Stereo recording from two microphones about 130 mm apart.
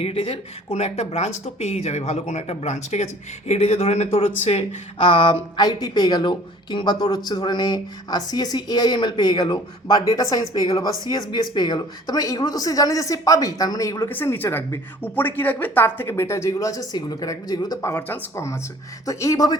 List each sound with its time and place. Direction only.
0.0 s speech: 50° left (ahead or behind); by 19.5 s 25° left (ahead or behind)